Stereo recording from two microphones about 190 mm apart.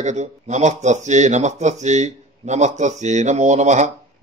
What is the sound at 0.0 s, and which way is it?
Speech, 40° right (ahead or behind).